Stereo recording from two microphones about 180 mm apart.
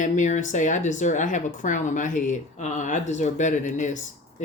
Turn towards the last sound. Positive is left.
turn(degrees=40)  # may be behind; listen again after turning